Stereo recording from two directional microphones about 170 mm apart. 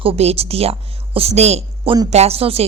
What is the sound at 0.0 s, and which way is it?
A woman's voice, 35° right (ahead or behind).